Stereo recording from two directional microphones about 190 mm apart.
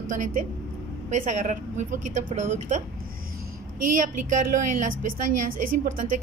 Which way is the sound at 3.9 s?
40° right (ahead or behind).